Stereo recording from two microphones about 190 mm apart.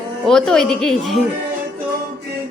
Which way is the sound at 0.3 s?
Centre (ahead or behind).